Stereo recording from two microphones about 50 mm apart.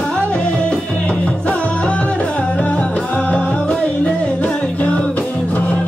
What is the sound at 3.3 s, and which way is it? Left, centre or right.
Music, left.